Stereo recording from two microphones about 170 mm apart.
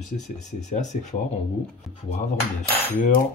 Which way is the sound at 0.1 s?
50° left (ahead or behind).